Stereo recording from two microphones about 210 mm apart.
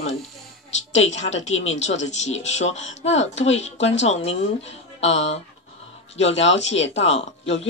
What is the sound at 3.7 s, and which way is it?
Speech, 60° left (ahead or behind).